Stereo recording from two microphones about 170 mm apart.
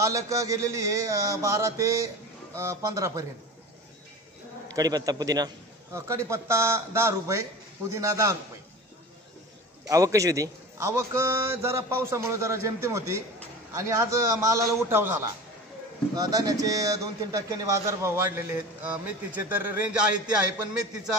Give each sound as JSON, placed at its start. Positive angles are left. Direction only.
{"t": 0.0, "sound": "a man's voice", "side_deg": -20}
{"t": 4.6, "sound": "a man's voice", "side_deg": -20}
{"t": 9.8, "sound": "a man's voice", "side_deg": -20}